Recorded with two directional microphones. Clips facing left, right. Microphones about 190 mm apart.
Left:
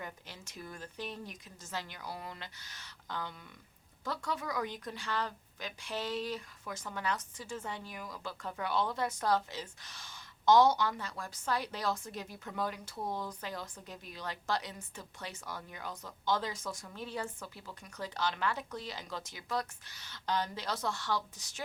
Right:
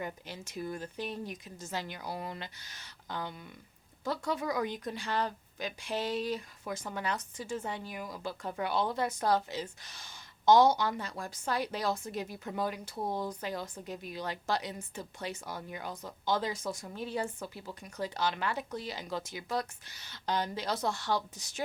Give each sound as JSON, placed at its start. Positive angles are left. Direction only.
{"t": 0.0, "sound": "a woman's voice", "side_deg": -10}